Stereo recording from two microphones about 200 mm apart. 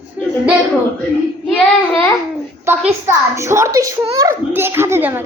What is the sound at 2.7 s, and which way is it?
A woman's voice, 10° right (ahead or behind).